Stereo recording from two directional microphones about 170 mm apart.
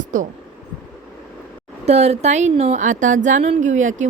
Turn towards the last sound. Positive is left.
turn(degrees=-45)  # may be behind; listen again after turning